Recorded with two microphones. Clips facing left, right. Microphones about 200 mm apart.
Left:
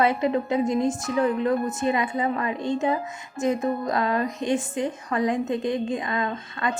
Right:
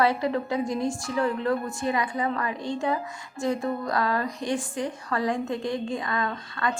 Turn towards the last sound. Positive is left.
turn(degrees=20)  # may be behind; listen again after turning